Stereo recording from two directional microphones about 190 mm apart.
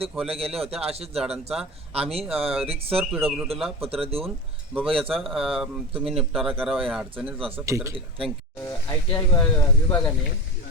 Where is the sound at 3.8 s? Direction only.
30° right (ahead or behind).